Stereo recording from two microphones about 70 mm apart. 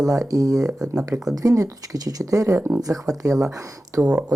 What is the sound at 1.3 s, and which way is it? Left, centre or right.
Speech, right.